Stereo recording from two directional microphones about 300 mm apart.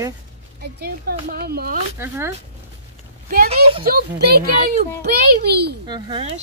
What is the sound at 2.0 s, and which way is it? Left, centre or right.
Speech, centre.